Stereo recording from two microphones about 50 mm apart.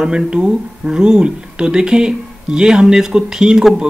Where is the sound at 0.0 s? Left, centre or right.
Centre.